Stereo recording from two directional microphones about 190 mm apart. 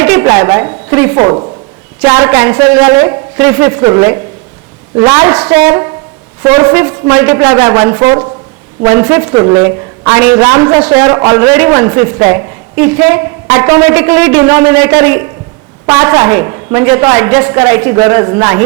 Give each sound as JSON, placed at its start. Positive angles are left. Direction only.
{"t": 0.0, "sound": "a man's voice", "side_deg": -15}